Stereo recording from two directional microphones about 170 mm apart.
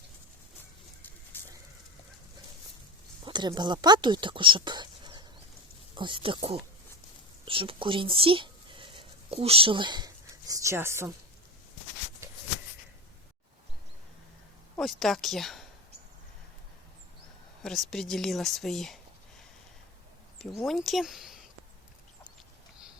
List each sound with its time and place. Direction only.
1.3 s a sound: 10° left (ahead or behind)
3.2 s speech: 25° right (ahead or behind)
14.8 s speech: centre (ahead or behind)
17.6 s a woman's voice: 5° left (ahead or behind)
20.7 s speech: centre (ahead or behind)